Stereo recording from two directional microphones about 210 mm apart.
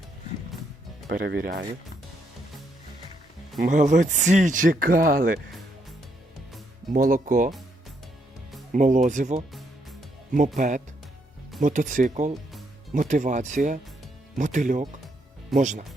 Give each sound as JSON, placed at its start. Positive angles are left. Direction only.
{"t": 1.0, "sound": "speech", "side_deg": -45}
{"t": 3.6, "sound": "speech", "side_deg": -35}
{"t": 6.9, "sound": "speech", "side_deg": -40}
{"t": 8.7, "sound": "speech", "side_deg": -40}